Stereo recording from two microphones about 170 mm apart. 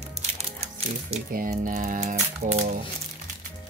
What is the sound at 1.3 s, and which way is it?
Speech, 50° right (ahead or behind).